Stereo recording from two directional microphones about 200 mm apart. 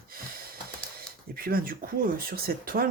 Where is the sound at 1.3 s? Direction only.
50° right (ahead or behind).